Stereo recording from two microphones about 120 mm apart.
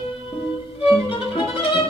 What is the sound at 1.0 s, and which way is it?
Music, 45° left (ahead or behind).